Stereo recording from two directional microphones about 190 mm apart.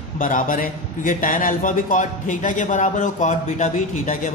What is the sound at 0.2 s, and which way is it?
A man's voice, 45° left (ahead or behind).